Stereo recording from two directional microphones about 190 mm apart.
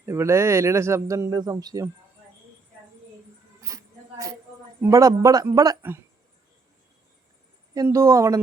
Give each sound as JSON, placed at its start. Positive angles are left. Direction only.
{"t": 0.0, "sound": "speech", "side_deg": -15}
{"t": 3.6, "sound": "a sound", "side_deg": -15}
{"t": 4.8, "sound": "speech", "side_deg": -15}
{"t": 7.7, "sound": "speech", "side_deg": -15}